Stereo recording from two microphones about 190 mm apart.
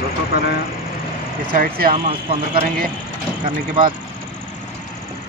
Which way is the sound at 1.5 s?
50° right (ahead or behind).